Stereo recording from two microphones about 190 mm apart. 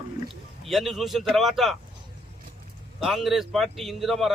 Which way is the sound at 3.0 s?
Centre (ahead or behind).